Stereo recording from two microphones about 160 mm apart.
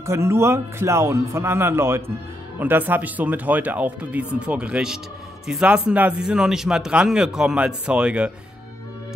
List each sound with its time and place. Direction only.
0.0 s a man's voice: 15° right (ahead or behind)